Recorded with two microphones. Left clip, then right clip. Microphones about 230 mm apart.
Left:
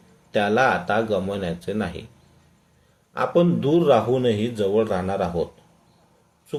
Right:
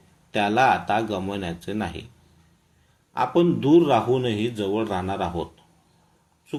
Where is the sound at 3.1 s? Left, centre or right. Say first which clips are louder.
Left 1 dB; right.